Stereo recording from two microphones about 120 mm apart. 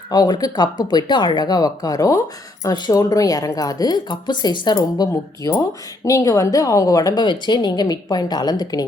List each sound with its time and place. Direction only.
0.1 s a woman's voice: 35° left (ahead or behind)